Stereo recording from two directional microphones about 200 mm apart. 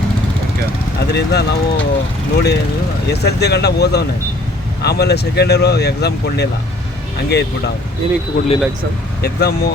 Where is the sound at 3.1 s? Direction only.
55° left (ahead or behind).